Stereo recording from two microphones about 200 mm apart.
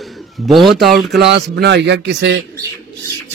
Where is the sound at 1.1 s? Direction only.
60° right (ahead or behind).